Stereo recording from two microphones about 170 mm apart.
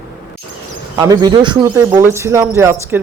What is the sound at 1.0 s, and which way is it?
A man's voice, 25° right (ahead or behind).